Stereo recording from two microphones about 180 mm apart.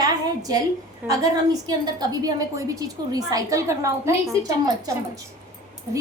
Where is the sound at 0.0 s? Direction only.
20° right (ahead or behind).